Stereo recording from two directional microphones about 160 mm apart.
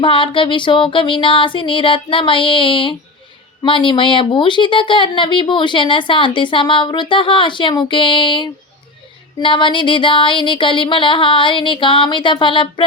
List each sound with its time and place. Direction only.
0.0 s speech: 30° left (ahead or behind)